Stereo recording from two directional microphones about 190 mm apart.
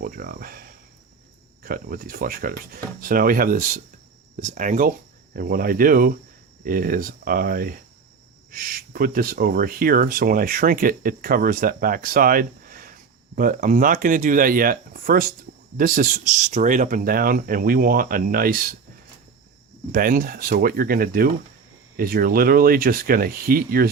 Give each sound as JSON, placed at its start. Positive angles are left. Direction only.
{"t": 0.0, "sound": "speech", "side_deg": -50}
{"t": 1.6, "sound": "speech", "side_deg": -50}
{"t": 19.9, "sound": "speech", "side_deg": -45}